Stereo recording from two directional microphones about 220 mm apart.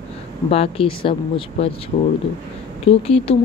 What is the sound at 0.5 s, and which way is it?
Speech, 25° left (ahead or behind).